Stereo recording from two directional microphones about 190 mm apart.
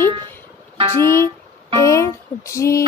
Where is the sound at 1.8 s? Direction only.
15° left (ahead or behind).